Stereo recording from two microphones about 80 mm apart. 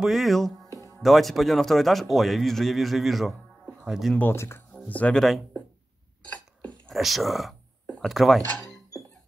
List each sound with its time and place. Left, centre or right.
0.0 s speech: centre
4.2 s speech: left
4.7 s speech: centre
5.2 s speech: centre
6.9 s speech: centre